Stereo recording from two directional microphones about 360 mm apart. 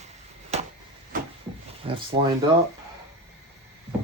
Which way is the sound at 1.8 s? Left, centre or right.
Centre.